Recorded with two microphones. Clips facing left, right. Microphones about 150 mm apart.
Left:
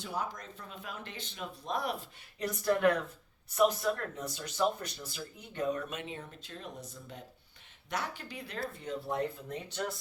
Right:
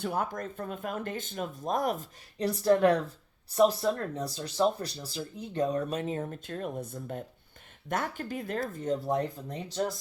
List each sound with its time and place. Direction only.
0.0 s speech: 55° right (ahead or behind); by 9.9 s 35° right (ahead or behind)